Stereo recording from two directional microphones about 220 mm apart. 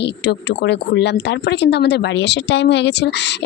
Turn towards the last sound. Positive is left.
turn(degrees=50)  # may be behind; listen again after turning